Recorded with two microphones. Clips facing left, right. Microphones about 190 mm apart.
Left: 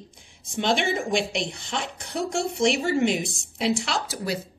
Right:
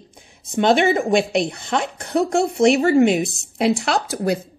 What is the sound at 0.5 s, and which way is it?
Speech, 60° right (ahead or behind).